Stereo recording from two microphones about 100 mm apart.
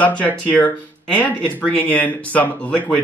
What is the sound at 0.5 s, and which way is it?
Speech, 15° left (ahead or behind).